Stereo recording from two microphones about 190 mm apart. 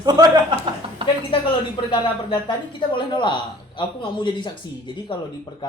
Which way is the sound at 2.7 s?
25° left (ahead or behind).